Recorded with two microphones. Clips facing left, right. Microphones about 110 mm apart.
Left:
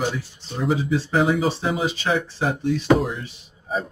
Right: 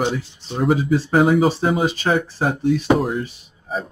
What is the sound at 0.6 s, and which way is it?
Speech, 50° right (ahead or behind).